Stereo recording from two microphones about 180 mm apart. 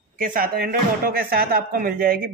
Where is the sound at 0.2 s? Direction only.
50° right (ahead or behind).